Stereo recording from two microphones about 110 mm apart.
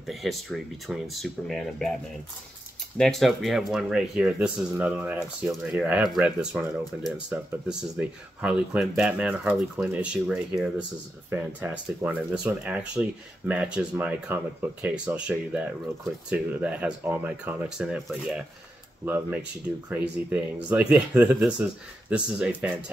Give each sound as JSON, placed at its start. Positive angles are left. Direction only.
{"t": 0.0, "sound": "speech", "side_deg": 0}
{"t": 3.0, "sound": "speech", "side_deg": 0}
{"t": 11.2, "sound": "speech", "side_deg": -20}
{"t": 17.6, "sound": "speech", "side_deg": -5}
{"t": 19.0, "sound": "speech", "side_deg": -15}